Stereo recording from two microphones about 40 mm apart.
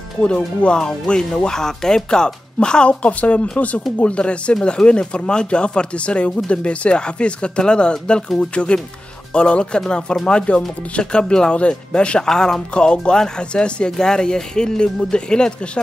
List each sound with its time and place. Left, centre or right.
0.7 s speech: centre
12.3 s speech: centre
12.7 s speech: left
13.9 s speech: centre